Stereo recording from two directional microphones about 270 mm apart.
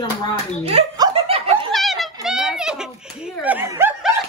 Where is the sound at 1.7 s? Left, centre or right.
Centre.